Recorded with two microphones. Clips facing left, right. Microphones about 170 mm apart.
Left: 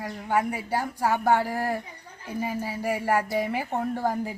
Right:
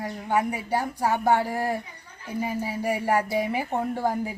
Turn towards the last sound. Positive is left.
turn(degrees=-10)  # may be behind; listen again after turning